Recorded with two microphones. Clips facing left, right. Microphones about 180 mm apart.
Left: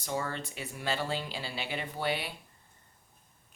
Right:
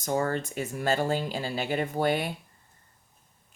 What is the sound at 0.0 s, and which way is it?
Speech, 45° right (ahead or behind).